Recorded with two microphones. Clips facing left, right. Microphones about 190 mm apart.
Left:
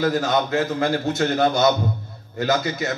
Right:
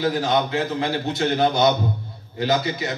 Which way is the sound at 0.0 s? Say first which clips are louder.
Left 1 dB; 50° left (ahead or behind).